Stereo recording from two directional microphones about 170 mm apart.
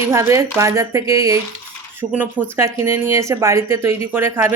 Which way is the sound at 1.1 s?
20° right (ahead or behind).